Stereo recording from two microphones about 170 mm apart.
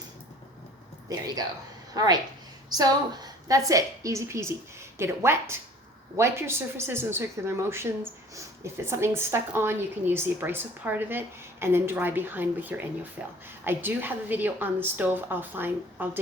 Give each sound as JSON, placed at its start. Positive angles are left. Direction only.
{"t": 2.0, "sound": "a woman's voice", "side_deg": -20}